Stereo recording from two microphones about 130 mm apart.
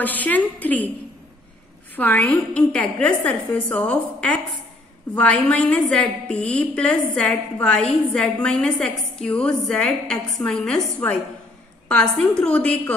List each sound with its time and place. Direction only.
0.0 s a woman's voice: 15° left (ahead or behind)
2.0 s a woman's voice: 15° left (ahead or behind)